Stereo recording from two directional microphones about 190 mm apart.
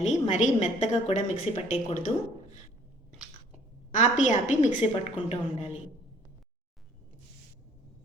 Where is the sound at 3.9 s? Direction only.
40° left (ahead or behind).